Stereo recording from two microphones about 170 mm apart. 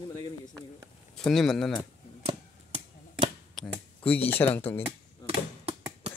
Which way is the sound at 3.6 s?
10° left (ahead or behind).